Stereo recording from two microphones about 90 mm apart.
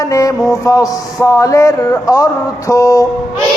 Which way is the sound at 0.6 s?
40° left (ahead or behind).